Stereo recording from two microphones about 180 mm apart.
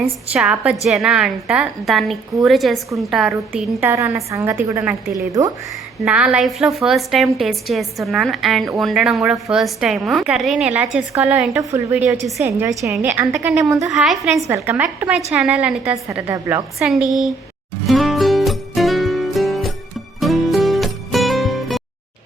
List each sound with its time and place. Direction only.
0.0 s a woman's voice: 5° right (ahead or behind)
3.8 s a woman's voice: 10° right (ahead or behind)
6.1 s a woman's voice: 5° right (ahead or behind)
13.7 s a woman's voice: 20° right (ahead or behind)
13.9 s a woman's voice: centre (ahead or behind)
14.4 s a woman's voice: 15° right (ahead or behind)
16.8 s a woman's voice: centre (ahead or behind)
17.8 s music: centre (ahead or behind)